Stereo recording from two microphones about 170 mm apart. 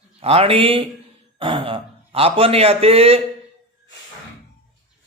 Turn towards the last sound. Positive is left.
turn(degrees=-35)  # may be behind; listen again after turning